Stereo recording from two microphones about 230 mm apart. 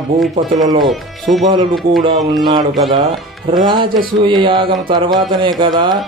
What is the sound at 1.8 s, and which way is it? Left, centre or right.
Speech, right.